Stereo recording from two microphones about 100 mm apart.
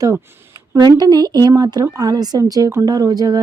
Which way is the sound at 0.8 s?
45° right (ahead or behind).